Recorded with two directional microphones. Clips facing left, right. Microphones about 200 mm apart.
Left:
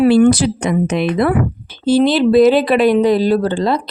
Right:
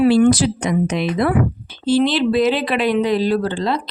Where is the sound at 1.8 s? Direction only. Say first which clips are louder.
Left 4 dB; 40° left (ahead or behind).